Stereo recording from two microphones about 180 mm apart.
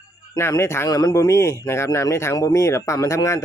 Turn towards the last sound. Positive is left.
turn(degrees=15)  # may be behind; listen again after turning